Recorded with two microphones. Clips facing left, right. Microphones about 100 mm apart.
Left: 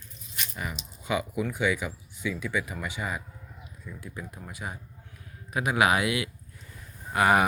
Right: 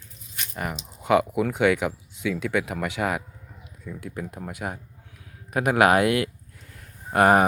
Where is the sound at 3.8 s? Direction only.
70° right (ahead or behind); by 7.4 s 50° right (ahead or behind).